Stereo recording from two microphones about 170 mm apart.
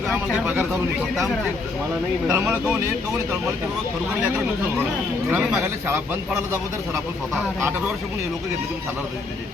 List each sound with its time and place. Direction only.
0.3 s speech: 10° right (ahead or behind)
2.3 s speech: 10° right (ahead or behind)
5.3 s speech: 5° right (ahead or behind)